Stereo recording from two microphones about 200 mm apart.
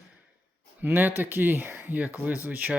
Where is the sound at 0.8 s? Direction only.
10° right (ahead or behind).